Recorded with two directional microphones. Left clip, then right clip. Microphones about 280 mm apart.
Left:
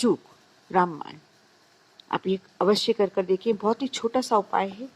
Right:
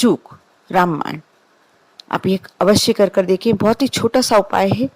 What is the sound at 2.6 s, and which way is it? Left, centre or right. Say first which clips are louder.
Speech: right 9 dB; right.